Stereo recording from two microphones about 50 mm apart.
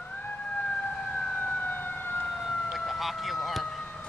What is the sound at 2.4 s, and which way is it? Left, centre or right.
Emergency vehicle, centre.